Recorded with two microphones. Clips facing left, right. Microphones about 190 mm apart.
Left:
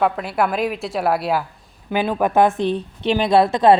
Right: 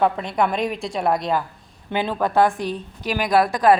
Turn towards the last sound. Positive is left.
turn(degrees=25)  # may be behind; listen again after turning